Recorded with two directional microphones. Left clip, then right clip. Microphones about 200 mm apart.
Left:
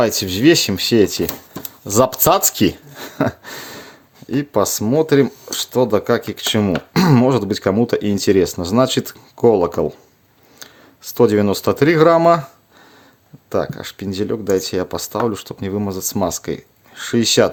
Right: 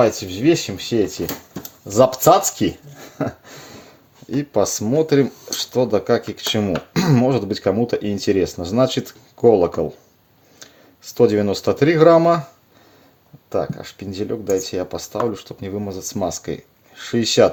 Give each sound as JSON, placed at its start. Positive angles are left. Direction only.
{"t": 0.0, "sound": "speech", "side_deg": 50}
{"t": 4.3, "sound": "speech", "side_deg": 25}
{"t": 13.5, "sound": "speech", "side_deg": 35}